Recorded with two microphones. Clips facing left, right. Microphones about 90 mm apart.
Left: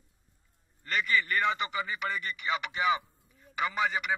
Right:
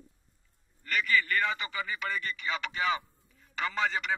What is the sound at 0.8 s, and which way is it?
A man's voice, 25° left (ahead or behind).